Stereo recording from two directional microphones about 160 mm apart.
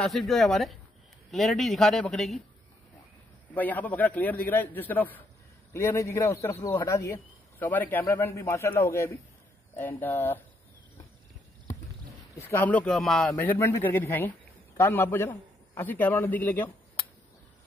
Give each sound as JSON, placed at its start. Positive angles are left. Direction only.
{"t": 0.0, "sound": "a man's voice", "side_deg": 0}
{"t": 3.5, "sound": "speech", "side_deg": 10}
{"t": 12.4, "sound": "speech", "side_deg": 15}
{"t": 13.3, "sound": "speech", "side_deg": 15}